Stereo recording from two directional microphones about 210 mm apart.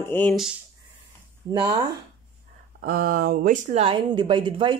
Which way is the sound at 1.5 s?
20° right (ahead or behind).